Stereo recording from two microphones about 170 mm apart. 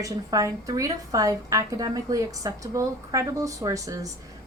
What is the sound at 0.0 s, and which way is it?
A woman's voice, 20° right (ahead or behind).